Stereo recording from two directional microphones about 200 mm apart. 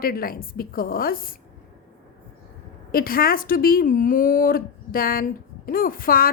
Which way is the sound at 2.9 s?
45° left (ahead or behind).